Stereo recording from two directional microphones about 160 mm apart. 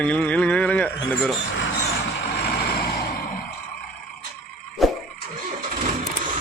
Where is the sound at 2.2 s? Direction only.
90° left; by 3.4 s 65° left (ahead or behind).